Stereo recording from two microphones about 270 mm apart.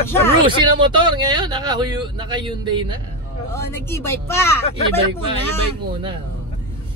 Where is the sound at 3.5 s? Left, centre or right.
Centre.